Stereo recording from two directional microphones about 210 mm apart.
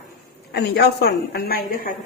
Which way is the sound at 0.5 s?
50° left (ahead or behind).